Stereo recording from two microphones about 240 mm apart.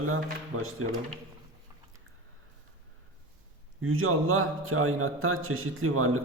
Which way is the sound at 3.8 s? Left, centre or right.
Right.